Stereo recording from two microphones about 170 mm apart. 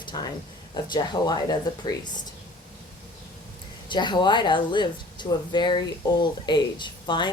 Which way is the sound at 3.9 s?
25° left (ahead or behind).